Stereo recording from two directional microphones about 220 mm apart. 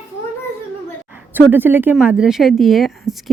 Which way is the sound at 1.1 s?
10° right (ahead or behind).